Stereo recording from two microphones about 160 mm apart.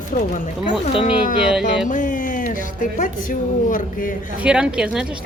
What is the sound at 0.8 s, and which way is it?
Speech, 40° left (ahead or behind).